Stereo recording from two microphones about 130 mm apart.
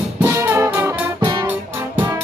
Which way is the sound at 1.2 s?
30° right (ahead or behind).